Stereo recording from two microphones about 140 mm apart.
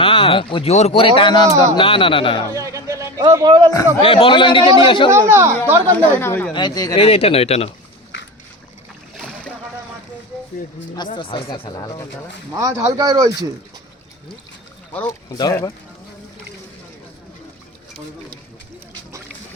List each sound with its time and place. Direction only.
0.0 s a man's voice: 40° left (ahead or behind)
1.5 s speech: 25° right (ahead or behind)
1.7 s a man's voice: 40° left (ahead or behind)
2.5 s a man's voice: 20° right (ahead or behind)
4.0 s a man's voice: 40° left (ahead or behind)
5.1 s speech: 20° right (ahead or behind)
6.0 s speech: 15° left (ahead or behind)
6.5 s speech: 30° left (ahead or behind)
7.0 s speech: 45° left (ahead or behind)
9.1 s boat: 5° left (ahead or behind)
10.9 s a man's voice: 35° left (ahead or behind)
12.5 s speech: 25° right (ahead or behind)
15.0 s speech: 25° left (ahead or behind)